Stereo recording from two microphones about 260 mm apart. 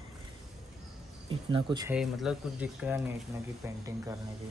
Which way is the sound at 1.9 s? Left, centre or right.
Centre.